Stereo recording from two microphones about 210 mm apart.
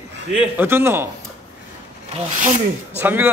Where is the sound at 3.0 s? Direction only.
10° right (ahead or behind).